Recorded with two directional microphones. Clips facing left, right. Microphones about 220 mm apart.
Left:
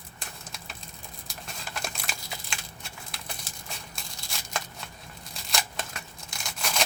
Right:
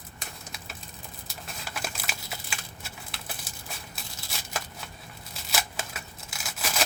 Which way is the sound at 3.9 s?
5° right (ahead or behind).